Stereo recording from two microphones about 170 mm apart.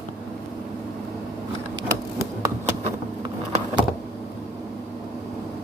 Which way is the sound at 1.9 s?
15° right (ahead or behind).